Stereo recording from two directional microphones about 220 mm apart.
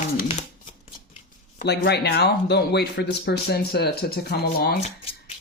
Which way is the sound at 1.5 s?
50° left (ahead or behind).